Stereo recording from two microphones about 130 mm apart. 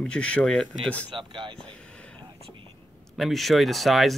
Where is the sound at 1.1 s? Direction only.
40° right (ahead or behind).